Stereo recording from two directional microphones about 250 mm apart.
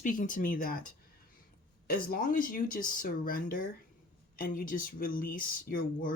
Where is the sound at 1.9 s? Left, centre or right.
Left.